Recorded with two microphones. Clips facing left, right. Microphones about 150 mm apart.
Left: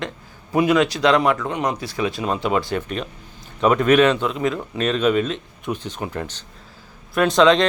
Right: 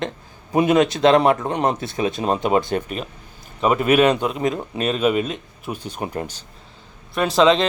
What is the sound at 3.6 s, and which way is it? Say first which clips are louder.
Speech: left 1 dB; 5° right (ahead or behind).